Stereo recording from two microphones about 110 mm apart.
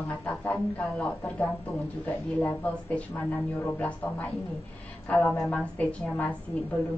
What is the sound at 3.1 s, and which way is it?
Speech, 20° left (ahead or behind).